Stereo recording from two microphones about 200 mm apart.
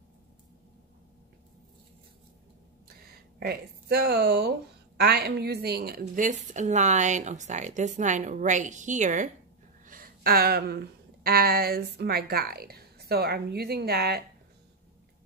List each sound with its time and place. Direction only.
3.3 s a woman's voice: 50° right (ahead or behind)